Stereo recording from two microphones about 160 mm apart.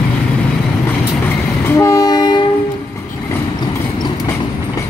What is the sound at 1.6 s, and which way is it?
Train, 20° left (ahead or behind).